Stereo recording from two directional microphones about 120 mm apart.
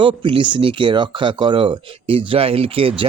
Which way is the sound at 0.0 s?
45° right (ahead or behind).